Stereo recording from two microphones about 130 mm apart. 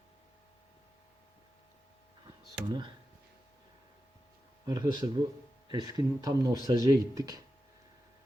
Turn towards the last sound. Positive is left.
turn(degrees=-30)  # may be behind; listen again after turning